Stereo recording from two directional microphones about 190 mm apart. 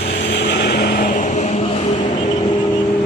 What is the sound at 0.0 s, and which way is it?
Vehicle, 65° left (ahead or behind).